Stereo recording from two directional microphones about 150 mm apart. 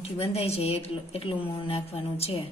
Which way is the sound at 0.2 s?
40° left (ahead or behind).